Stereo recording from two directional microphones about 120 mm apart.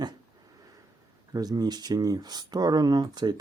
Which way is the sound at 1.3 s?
35° right (ahead or behind).